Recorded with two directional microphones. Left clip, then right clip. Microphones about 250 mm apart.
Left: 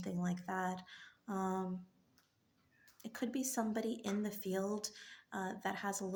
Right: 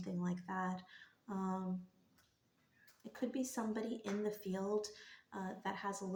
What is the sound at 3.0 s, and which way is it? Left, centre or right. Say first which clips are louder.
Speech: left 1 dB; left.